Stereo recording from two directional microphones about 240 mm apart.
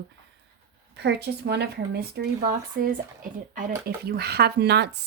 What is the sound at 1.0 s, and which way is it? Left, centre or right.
Speech, right.